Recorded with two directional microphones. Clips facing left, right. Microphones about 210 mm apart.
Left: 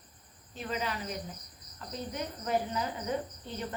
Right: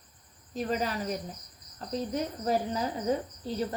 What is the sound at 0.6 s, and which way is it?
Speech, 40° right (ahead or behind).